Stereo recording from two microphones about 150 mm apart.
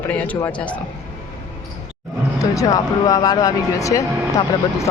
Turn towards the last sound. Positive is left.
turn(degrees=20)  # may be behind; listen again after turning